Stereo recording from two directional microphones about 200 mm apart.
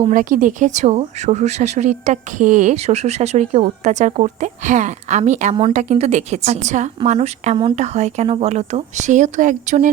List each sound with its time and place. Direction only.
0.1 s speech: 40° right (ahead or behind)